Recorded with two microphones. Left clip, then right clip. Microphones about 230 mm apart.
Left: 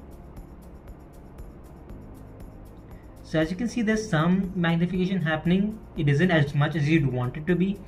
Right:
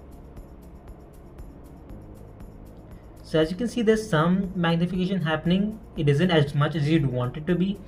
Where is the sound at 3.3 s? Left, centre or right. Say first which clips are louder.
Right 3 dB; right.